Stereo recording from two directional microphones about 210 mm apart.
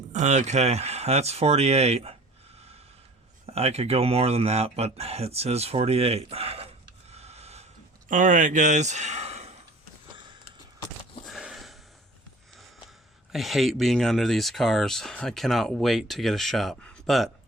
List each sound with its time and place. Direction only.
0.1 s speech: 35° right (ahead or behind)
3.4 s speech: 30° right (ahead or behind)
7.1 s a sound: 30° right (ahead or behind)
11.3 s sniff: centre (ahead or behind)
13.3 s speech: centre (ahead or behind)